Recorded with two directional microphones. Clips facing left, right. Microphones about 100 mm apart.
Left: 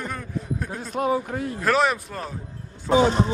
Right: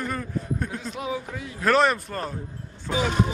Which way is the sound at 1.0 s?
50° left (ahead or behind).